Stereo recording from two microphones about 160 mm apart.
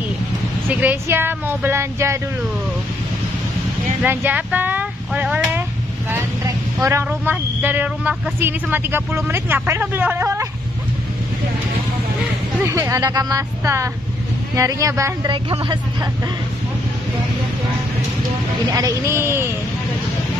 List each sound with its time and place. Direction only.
0.7 s speech: 10° right (ahead or behind)
4.0 s a sound: 10° right (ahead or behind)
6.0 s speech: 20° right (ahead or behind)
12.6 s a woman's voice: 20° right (ahead or behind)
15.3 s speech: 30° right (ahead or behind)
18.7 s speech: 20° right (ahead or behind)